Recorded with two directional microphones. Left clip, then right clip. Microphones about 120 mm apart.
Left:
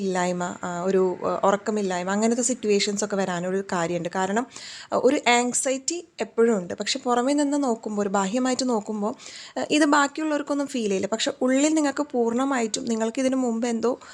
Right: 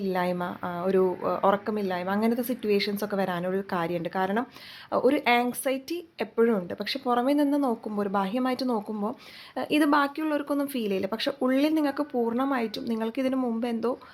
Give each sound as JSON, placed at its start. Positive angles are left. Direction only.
{"t": 0.0, "sound": "speech", "side_deg": 20}